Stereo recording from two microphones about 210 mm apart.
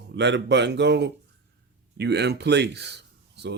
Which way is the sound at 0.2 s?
55° right (ahead or behind).